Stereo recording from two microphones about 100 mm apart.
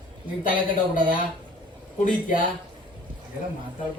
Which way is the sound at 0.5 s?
55° right (ahead or behind).